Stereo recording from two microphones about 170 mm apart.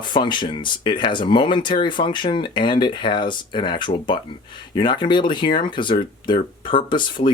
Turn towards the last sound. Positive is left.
turn(degrees=30)  # may be behind; listen again after turning